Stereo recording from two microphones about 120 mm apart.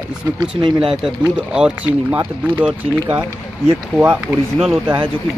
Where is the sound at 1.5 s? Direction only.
10° right (ahead or behind).